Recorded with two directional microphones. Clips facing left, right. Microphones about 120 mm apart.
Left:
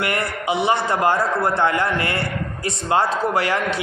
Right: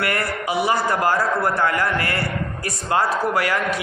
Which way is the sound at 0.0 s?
20° left (ahead or behind).